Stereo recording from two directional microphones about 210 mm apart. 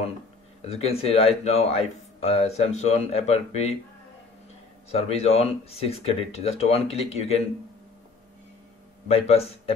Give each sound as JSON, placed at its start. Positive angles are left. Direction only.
{"t": 0.7, "sound": "speech", "side_deg": 30}
{"t": 4.9, "sound": "speech", "side_deg": 30}
{"t": 9.0, "sound": "a man's voice", "side_deg": 30}